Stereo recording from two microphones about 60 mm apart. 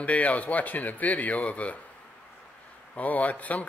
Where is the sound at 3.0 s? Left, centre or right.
Left.